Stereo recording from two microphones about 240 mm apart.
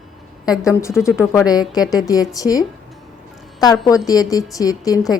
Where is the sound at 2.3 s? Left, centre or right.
Centre.